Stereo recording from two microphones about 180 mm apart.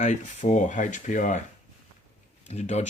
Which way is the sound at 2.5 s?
40° left (ahead or behind).